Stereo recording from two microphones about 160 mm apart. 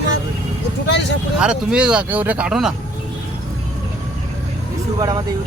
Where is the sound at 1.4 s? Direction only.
5° right (ahead or behind).